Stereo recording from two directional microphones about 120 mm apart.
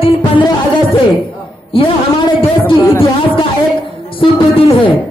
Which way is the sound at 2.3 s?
45° left (ahead or behind).